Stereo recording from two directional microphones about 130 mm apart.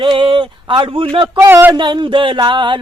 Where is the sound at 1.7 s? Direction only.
35° right (ahead or behind).